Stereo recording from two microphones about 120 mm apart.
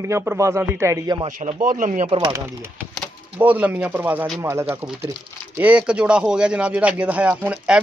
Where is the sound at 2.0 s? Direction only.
40° right (ahead or behind).